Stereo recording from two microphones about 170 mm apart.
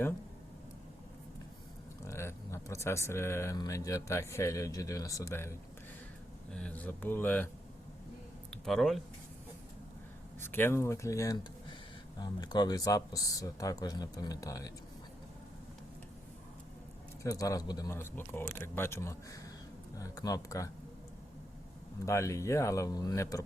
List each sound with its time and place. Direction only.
2.0 s speech: 15° left (ahead or behind)
10.4 s speech: 15° left (ahead or behind)
17.2 s speech: 20° left (ahead or behind)
22.0 s speech: 15° left (ahead or behind)